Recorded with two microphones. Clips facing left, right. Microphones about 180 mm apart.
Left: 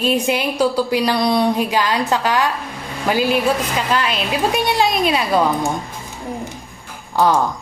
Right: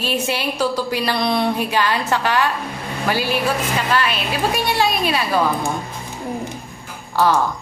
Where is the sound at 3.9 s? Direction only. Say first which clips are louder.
Left 2 dB; 20° left (ahead or behind).